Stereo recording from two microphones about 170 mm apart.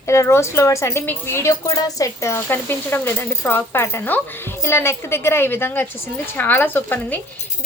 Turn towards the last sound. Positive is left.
turn(degrees=10)  # may be behind; listen again after turning